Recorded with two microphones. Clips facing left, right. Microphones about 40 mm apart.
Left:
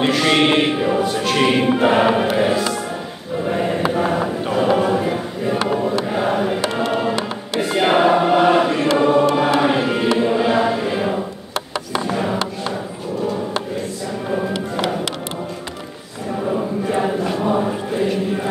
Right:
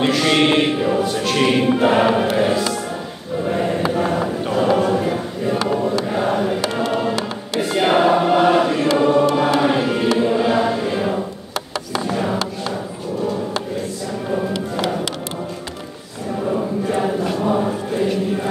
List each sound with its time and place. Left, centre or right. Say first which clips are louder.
0.0 s speech: even; centre
3.4 s choir: even; centre
5.6 s a sound: left 1 dB; left
6.0 s choir: even; centre
9.6 s music: even; centre
11.7 s a sound: even; left
16.4 s choir: even; centre